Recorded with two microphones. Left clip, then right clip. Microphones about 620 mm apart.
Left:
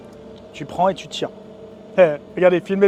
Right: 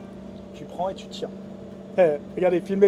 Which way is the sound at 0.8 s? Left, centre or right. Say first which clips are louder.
Left 10 dB; left.